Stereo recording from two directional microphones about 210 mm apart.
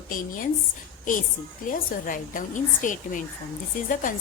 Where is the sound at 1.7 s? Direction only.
40° left (ahead or behind).